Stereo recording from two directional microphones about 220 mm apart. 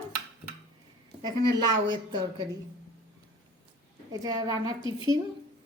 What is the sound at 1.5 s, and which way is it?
Speech, 20° right (ahead or behind).